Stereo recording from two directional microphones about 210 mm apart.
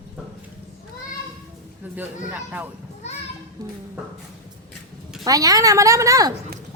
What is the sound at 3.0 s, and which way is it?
Children playing, 30° left (ahead or behind).